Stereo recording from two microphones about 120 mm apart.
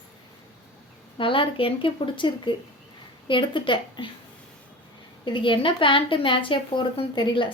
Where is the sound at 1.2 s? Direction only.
45° left (ahead or behind).